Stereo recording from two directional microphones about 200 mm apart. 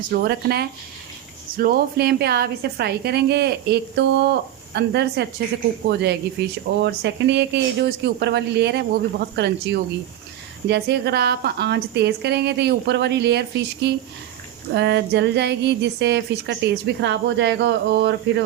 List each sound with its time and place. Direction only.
0.1 s a woman's voice: 55° right (ahead or behind)